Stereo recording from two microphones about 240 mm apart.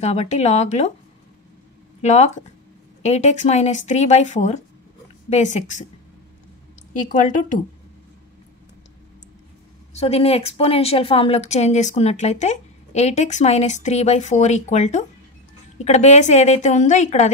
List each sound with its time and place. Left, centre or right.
0.0 s speech: left
2.0 s speech: left
6.9 s speech: left
9.9 s speech: left